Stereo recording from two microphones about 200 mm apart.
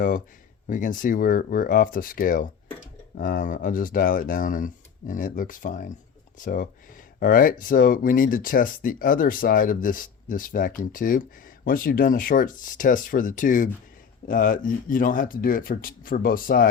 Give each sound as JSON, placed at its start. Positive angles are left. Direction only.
{"t": 0.7, "sound": "speech", "side_deg": 40}